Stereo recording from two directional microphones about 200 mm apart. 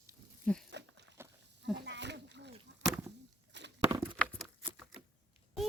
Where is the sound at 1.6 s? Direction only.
60° right (ahead or behind).